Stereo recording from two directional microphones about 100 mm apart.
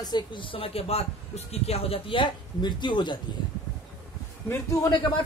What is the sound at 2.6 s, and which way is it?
Speech, 50° left (ahead or behind).